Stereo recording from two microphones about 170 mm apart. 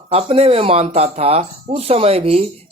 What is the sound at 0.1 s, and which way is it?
Speech, 35° right (ahead or behind).